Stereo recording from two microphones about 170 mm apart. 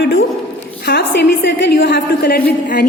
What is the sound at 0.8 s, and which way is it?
A woman's voice, 75° left (ahead or behind).